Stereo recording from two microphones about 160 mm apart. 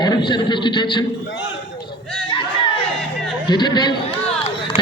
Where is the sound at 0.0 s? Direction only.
30° left (ahead or behind).